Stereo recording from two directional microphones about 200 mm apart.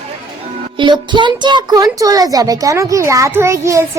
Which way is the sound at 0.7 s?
25° right (ahead or behind).